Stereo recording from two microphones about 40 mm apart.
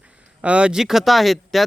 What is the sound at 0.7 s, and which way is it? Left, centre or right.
Speech, centre.